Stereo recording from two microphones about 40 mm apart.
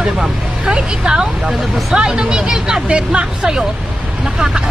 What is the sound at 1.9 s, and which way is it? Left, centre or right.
Speech, centre.